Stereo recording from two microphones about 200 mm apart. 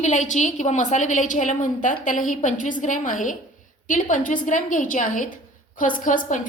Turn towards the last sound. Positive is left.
turn(degrees=40)  # may be behind; listen again after turning